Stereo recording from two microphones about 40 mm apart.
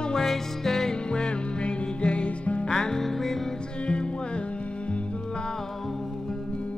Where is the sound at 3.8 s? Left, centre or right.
Left.